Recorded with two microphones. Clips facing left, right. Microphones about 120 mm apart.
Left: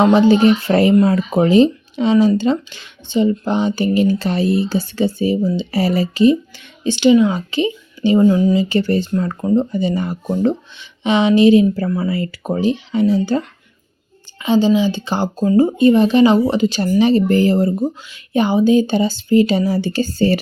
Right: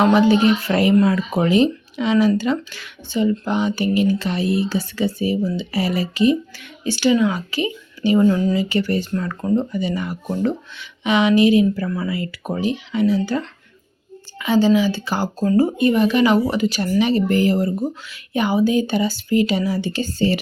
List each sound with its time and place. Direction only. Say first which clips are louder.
0.0 s speech: left 3 dB; 30° left (ahead or behind)
8.7 s speech: left 4 dB; 30° left (ahead or behind)